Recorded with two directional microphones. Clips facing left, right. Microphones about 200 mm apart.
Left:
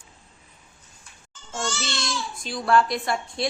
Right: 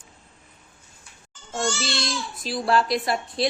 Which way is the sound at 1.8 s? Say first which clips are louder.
Right 2 dB; 30° right (ahead or behind).